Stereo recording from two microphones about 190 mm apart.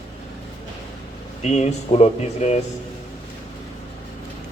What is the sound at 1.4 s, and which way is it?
Speech, 35° left (ahead or behind).